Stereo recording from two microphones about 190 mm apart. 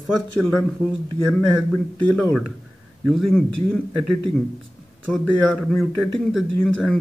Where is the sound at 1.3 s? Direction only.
5° left (ahead or behind).